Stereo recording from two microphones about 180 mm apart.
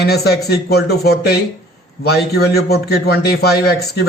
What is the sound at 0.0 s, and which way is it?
Speech, 65° left (ahead or behind).